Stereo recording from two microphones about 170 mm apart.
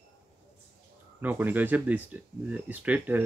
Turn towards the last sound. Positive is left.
turn(degrees=-10)  # may be behind; listen again after turning